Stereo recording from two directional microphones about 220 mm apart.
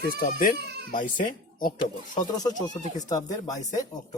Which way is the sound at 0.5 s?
45° right (ahead or behind).